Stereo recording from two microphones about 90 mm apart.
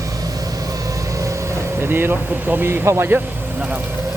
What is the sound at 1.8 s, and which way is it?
Speech, 25° right (ahead or behind).